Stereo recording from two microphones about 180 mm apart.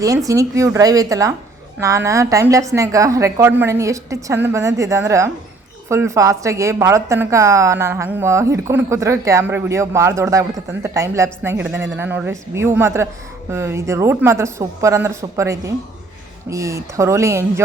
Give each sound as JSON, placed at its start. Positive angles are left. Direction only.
{"t": 0.3, "sound": "a woman's voice", "side_deg": -15}